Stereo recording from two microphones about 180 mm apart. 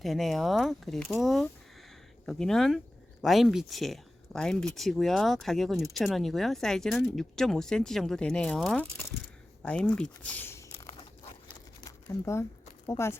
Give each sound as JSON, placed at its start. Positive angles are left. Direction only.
{"t": 0.0, "sound": "speech", "side_deg": 0}
{"t": 11.9, "sound": "crumpling", "side_deg": 15}